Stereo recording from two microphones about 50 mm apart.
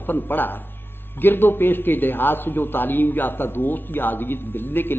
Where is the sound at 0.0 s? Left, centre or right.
Left.